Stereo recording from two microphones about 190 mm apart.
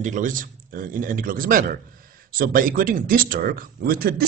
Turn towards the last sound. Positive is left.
turn(degrees=-55)  # may be behind; listen again after turning